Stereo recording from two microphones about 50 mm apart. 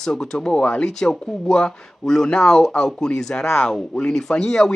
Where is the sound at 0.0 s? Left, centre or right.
Centre.